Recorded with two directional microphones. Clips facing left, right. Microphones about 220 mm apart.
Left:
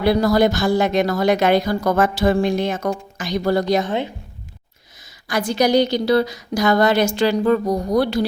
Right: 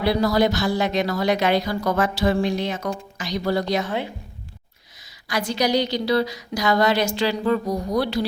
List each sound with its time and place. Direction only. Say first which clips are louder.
0.0 s a woman's voice: left 4 dB; 50° left (ahead or behind)
3.8 s a woman's voice: left 4 dB; 25° left (ahead or behind)
5.3 s a woman's voice: left 5 dB; 50° left (ahead or behind)